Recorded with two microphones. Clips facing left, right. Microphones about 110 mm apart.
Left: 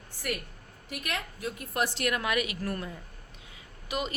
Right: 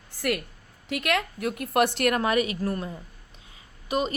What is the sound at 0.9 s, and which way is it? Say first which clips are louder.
A woman's voice: right 9 dB; 85° right.